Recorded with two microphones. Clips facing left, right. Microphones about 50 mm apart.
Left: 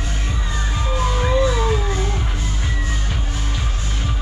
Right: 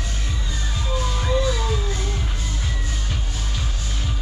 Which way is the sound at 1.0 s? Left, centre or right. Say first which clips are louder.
Left 5 dB; left.